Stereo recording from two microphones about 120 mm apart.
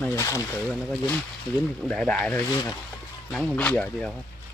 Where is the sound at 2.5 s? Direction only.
30° left (ahead or behind).